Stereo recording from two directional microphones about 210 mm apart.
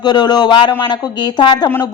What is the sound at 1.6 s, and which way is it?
Speech, 10° left (ahead or behind).